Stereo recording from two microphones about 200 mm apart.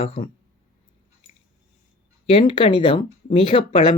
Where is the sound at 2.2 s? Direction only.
25° left (ahead or behind).